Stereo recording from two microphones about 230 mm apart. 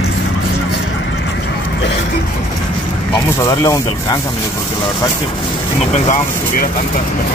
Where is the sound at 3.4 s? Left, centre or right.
Centre.